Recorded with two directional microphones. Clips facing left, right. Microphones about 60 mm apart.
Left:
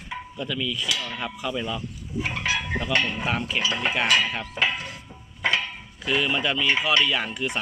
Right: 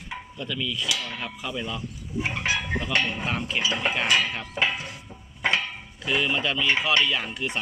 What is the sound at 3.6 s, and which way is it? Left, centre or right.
Dishes, left.